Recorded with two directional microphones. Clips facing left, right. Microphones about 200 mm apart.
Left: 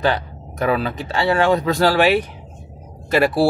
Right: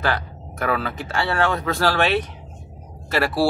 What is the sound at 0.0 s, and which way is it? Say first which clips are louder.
Speech: left 4 dB; 15° left (ahead or behind).